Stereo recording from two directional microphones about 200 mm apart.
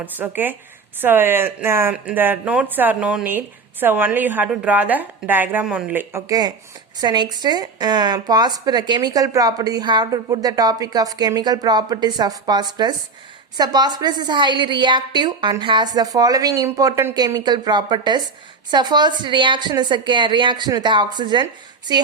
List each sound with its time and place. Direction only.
0.0 s speech: 10° right (ahead or behind)